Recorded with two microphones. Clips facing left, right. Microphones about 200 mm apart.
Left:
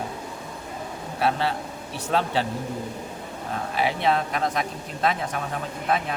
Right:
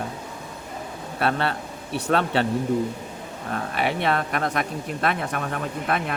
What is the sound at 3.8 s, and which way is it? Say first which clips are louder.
Speech: left 1 dB; 60° right (ahead or behind).